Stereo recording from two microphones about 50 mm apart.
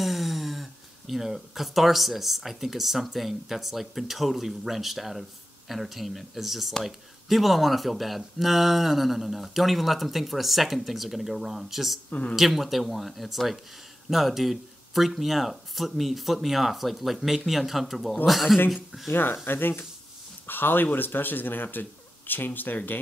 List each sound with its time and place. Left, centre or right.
0.0 s speech: centre
12.1 s speech: left
12.4 s speech: centre
19.0 s speech: left